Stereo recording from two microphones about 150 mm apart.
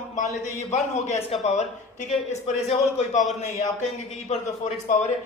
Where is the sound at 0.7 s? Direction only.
50° left (ahead or behind).